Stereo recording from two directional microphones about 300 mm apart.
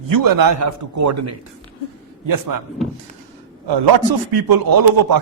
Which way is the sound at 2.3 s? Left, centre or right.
Right.